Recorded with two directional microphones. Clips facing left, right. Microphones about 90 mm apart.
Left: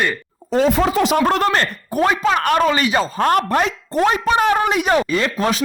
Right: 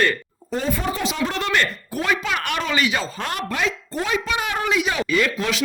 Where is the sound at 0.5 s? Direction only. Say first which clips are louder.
Left 9 dB; 90° left; by 1.5 s 55° left (ahead or behind).